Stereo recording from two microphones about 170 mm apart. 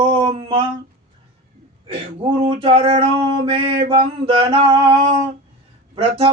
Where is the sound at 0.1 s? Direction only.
30° right (ahead or behind).